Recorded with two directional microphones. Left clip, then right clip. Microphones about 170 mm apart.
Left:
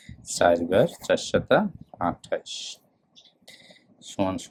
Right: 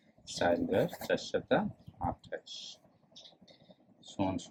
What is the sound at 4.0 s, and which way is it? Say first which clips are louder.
Speech: left 8 dB; 45° left (ahead or behind).